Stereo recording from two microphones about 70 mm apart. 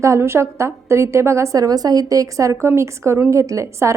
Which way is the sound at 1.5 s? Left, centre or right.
Right.